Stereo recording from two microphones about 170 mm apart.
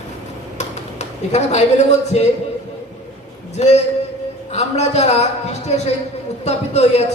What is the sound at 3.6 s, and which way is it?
A man's voice, 40° left (ahead or behind).